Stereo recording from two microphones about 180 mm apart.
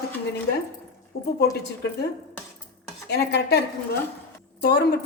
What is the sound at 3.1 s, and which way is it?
A woman's voice, 65° left (ahead or behind).